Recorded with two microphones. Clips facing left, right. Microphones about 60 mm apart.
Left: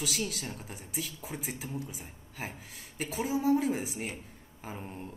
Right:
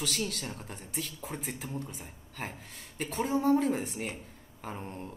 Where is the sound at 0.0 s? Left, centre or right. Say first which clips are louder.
Right 1 dB; centre.